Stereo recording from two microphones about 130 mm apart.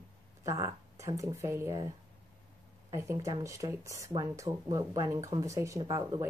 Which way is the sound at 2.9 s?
25° right (ahead or behind).